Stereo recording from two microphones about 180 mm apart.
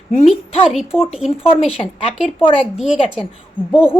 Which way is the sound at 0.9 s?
35° left (ahead or behind).